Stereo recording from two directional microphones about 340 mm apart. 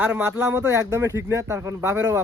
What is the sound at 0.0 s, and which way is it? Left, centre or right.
Speech, centre.